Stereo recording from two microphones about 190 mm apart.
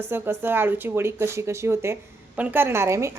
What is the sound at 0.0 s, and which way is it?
A woman's voice, 10° right (ahead or behind).